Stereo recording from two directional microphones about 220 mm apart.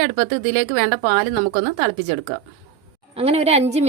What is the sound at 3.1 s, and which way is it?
Speech, 25° right (ahead or behind).